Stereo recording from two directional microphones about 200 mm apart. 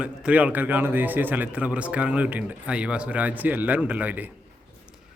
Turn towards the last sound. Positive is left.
turn(degrees=-10)  # may be behind; listen again after turning